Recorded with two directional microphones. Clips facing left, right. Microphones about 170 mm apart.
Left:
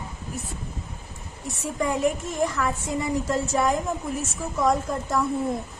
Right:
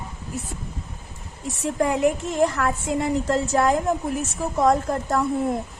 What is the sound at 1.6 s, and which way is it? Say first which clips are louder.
A woman's voice: right 3 dB; 70° right (ahead or behind).